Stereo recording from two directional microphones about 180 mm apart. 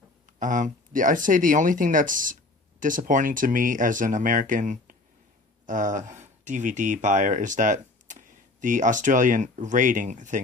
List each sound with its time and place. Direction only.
0.3 s speech: 45° right (ahead or behind)